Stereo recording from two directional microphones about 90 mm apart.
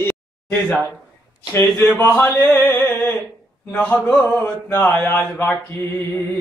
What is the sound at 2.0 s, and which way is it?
Music, 20° left (ahead or behind).